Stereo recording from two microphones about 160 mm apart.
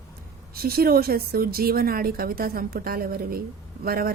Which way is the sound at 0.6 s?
70° right (ahead or behind).